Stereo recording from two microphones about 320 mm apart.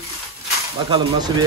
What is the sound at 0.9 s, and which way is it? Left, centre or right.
Speech, centre.